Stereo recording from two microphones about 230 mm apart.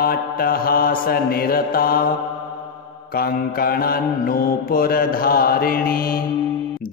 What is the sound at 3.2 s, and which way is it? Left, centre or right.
Mantra, left.